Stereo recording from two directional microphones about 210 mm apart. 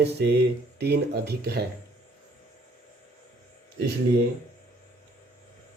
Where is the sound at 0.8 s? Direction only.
50° right (ahead or behind).